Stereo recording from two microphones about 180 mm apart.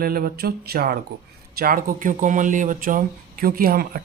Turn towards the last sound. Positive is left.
turn(degrees=-55)  # may be behind; listen again after turning